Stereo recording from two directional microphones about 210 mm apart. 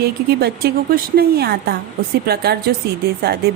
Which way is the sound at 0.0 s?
50° right (ahead or behind).